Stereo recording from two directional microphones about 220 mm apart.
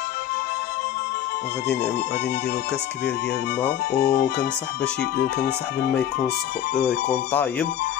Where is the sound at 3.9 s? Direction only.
45° left (ahead or behind).